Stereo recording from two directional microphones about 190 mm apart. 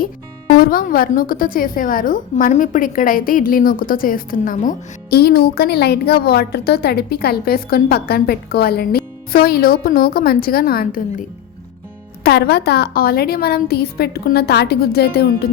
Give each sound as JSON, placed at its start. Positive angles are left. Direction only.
{"t": 0.5, "sound": "a woman's voice", "side_deg": 50}